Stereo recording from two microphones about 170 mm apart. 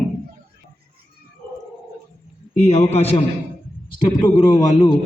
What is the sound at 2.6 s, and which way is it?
Speech, 40° left (ahead or behind).